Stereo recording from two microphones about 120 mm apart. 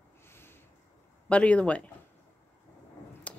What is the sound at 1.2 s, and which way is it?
Speech, 10° left (ahead or behind).